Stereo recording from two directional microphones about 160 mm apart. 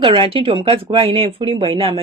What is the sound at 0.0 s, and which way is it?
Speech, 35° right (ahead or behind).